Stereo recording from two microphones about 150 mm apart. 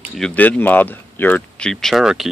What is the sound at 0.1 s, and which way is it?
Speech, 5° left (ahead or behind).